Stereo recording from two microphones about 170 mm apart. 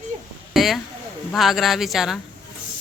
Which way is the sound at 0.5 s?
Centre (ahead or behind).